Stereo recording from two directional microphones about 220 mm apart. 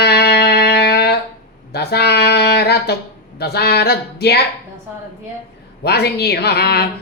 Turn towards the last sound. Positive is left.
turn(degrees=45)  # may be behind; listen again after turning